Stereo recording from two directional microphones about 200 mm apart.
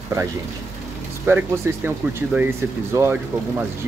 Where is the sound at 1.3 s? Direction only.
10° right (ahead or behind).